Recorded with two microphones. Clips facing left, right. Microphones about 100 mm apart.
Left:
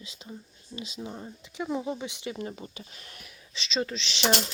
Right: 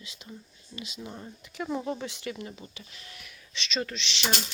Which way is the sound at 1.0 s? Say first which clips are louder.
Left 2 dB; 20° left (ahead or behind).